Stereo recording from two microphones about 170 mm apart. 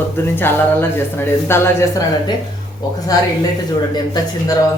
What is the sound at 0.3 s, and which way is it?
Speech, 15° left (ahead or behind).